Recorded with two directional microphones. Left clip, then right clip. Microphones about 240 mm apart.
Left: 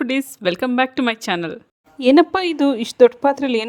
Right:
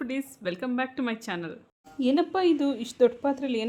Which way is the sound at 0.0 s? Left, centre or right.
Left.